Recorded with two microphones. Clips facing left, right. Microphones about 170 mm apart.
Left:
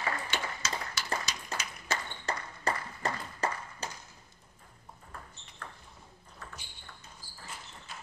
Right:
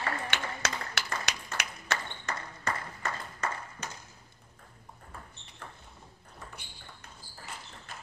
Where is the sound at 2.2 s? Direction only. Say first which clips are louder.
Left 3 dB; 35° left (ahead or behind).